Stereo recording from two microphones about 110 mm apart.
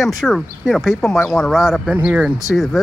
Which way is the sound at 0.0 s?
Centre (ahead or behind).